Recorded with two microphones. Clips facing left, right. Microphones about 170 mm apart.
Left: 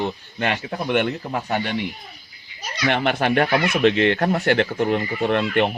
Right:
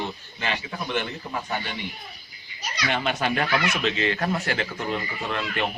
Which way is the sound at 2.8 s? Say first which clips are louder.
Left 6 dB; 65° left (ahead or behind).